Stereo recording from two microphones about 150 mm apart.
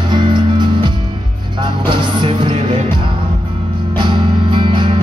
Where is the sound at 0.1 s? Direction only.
30° right (ahead or behind).